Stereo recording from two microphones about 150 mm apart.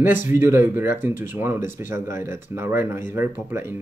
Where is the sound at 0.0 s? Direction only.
15° right (ahead or behind).